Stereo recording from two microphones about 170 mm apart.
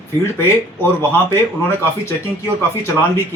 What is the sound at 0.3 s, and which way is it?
Speech, 15° left (ahead or behind).